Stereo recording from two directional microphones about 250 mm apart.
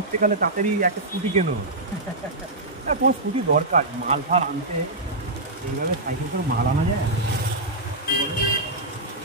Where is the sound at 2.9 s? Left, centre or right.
Right.